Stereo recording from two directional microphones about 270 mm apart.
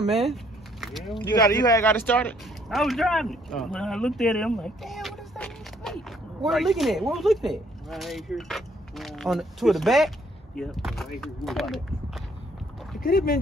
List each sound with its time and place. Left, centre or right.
0.0 s vehicle: centre
1.1 s speech: centre
13.0 s speech: left